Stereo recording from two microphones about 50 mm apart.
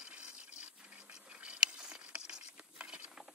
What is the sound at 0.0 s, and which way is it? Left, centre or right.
Water, right.